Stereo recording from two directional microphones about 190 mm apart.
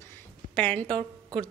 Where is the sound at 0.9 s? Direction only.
25° right (ahead or behind).